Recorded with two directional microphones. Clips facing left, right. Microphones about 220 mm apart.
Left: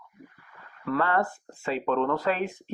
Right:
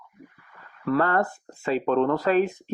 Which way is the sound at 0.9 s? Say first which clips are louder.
Right 3 dB; 45° right (ahead or behind).